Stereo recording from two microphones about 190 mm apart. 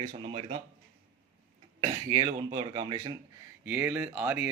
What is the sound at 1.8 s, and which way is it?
Speech, 20° right (ahead or behind).